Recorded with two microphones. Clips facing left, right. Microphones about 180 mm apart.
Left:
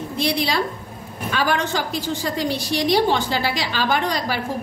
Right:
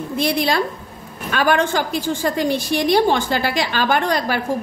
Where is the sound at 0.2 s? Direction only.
50° right (ahead or behind).